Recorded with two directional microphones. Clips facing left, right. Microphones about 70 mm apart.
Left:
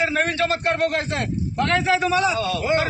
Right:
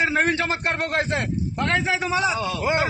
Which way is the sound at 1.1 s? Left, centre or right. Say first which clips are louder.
Left 1 dB; centre.